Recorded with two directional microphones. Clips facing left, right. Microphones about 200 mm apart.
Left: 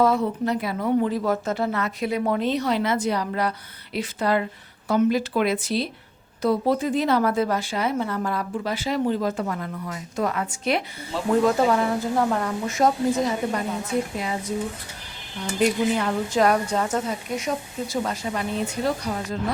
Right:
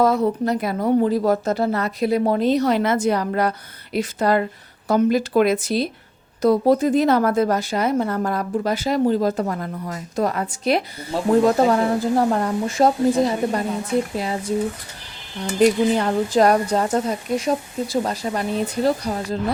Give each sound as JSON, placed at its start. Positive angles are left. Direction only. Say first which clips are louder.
{"t": 0.0, "sound": "a woman's voice", "louder": "right 3 dB", "side_deg": -40}
{"t": 16.0, "sound": "a woman's voice", "louder": "right 4 dB", "side_deg": -35}